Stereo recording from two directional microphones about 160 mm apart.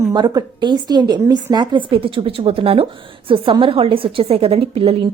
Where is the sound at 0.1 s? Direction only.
25° right (ahead or behind).